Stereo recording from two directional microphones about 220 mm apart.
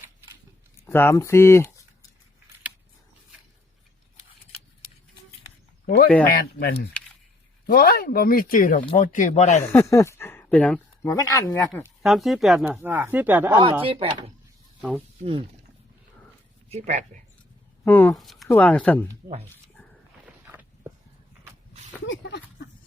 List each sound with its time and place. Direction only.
0.9 s speech: 10° left (ahead or behind)
6.3 s speech: 45° left (ahead or behind); by 9.6 s 30° left (ahead or behind)
9.6 s speech: 10° left (ahead or behind)
12.0 s speech: centre (ahead or behind)
13.5 s speech: 20° right (ahead or behind)
14.8 s speech: 5° left (ahead or behind)
15.2 s speech: 25° right (ahead or behind)
16.6 s speech: 30° right (ahead or behind)
17.8 s speech: 10° left (ahead or behind)
22.0 s a sound: 55° left (ahead or behind)